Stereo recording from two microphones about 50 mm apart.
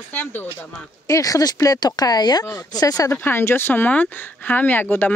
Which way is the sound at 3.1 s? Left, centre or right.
Left.